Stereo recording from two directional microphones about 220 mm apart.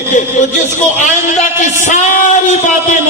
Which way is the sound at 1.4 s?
35° left (ahead or behind).